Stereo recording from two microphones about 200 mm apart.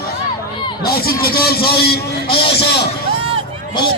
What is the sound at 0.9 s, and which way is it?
A man's voice, 50° left (ahead or behind).